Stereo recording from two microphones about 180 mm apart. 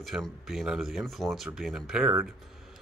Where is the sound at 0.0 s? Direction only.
Centre (ahead or behind).